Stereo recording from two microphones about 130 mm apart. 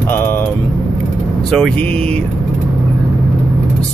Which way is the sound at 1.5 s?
5° left (ahead or behind).